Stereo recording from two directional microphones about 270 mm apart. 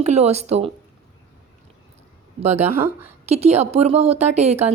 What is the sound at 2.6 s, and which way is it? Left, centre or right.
Speech, centre.